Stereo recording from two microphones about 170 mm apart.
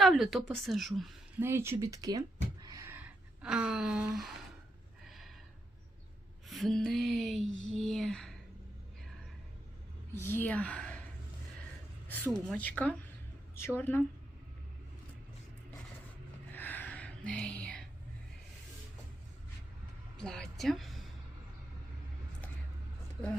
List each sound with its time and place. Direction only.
0.0 s a woman's voice: centre (ahead or behind)
1.4 s speech: 15° right (ahead or behind)
3.4 s a woman's voice: 5° right (ahead or behind)
5.0 s a sound: centre (ahead or behind)
6.5 s music: centre (ahead or behind)
7.7 s a sound: 5° left (ahead or behind)
10.2 s speech: 10° left (ahead or behind)
12.0 s speech: 10° left (ahead or behind)
16.5 s music: 10° left (ahead or behind)
20.2 s a woman's voice: 5° left (ahead or behind)